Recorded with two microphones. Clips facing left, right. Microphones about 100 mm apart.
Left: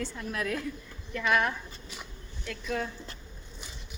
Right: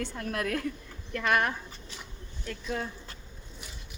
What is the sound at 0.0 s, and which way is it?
A woman's voice, 55° right (ahead or behind).